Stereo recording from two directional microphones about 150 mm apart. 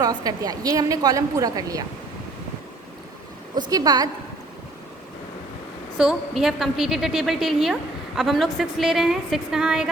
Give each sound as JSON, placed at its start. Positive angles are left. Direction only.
{"t": 0.0, "sound": "a woman's voice", "side_deg": -25}
{"t": 3.7, "sound": "a woman's voice", "side_deg": -25}
{"t": 6.0, "sound": "a woman's voice", "side_deg": -5}